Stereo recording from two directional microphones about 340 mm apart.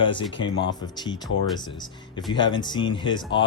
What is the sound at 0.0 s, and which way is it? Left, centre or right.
A man's voice, centre.